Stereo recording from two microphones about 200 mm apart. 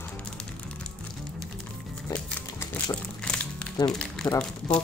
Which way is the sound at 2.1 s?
10° left (ahead or behind).